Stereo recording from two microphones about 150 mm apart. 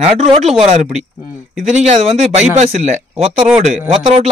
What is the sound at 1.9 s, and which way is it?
Speech, 45° right (ahead or behind).